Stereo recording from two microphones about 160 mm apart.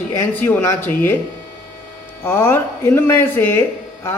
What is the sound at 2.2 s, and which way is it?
Speech, 15° left (ahead or behind).